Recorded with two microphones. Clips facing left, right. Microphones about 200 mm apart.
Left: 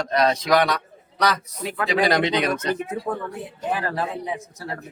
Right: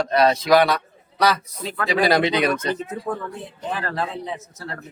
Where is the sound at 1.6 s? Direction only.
10° left (ahead or behind).